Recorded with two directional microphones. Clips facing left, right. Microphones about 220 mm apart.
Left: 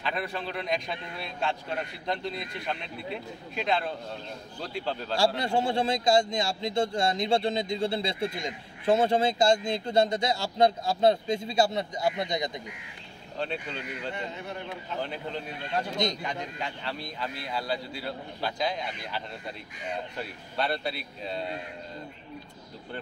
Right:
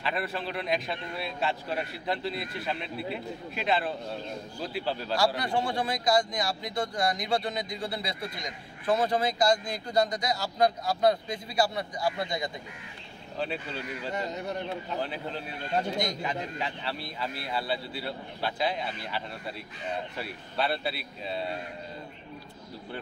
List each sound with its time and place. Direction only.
0.0 s a man's voice: centre (ahead or behind)
5.1 s a man's voice: 25° left (ahead or behind)
13.4 s a man's voice: 5° right (ahead or behind)
14.1 s speech: 40° right (ahead or behind)
15.0 s a man's voice: 5° right (ahead or behind)